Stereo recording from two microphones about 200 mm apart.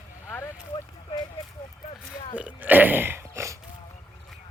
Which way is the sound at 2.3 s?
5° right (ahead or behind).